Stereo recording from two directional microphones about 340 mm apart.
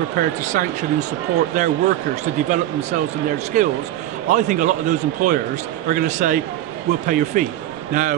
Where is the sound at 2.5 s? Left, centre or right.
Right.